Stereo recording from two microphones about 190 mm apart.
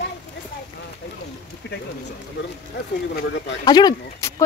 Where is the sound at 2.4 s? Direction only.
70° left (ahead or behind).